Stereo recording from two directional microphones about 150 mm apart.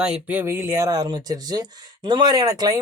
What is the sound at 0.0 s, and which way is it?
Speech, 10° right (ahead or behind).